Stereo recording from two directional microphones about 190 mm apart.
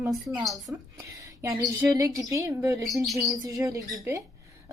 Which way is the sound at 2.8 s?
Centre (ahead or behind).